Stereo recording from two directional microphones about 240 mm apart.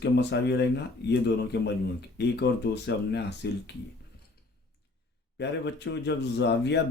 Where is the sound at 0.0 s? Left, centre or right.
Left.